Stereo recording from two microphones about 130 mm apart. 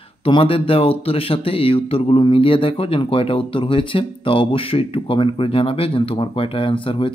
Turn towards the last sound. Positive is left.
turn(degrees=40)  # may be behind; listen again after turning